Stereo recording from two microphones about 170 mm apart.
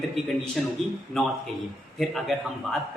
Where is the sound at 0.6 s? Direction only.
5° left (ahead or behind).